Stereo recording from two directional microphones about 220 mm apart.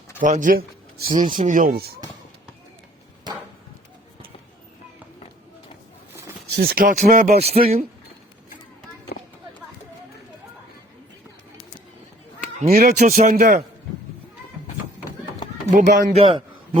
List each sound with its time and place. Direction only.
0.2 s speech: 35° right (ahead or behind)
6.6 s speech: 40° right (ahead or behind)
7.3 s a man's voice: 25° right (ahead or behind)
9.1 s a sound: 45° left (ahead or behind)
12.5 s speech: 35° right (ahead or behind)
15.7 s speech: 40° right (ahead or behind)